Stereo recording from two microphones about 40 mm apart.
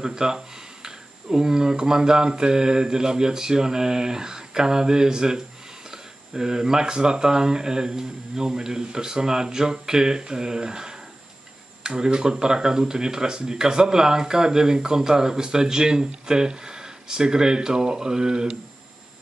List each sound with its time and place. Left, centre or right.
0.0 s speech: centre